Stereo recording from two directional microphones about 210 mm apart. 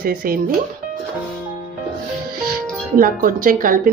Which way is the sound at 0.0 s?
45° right (ahead or behind).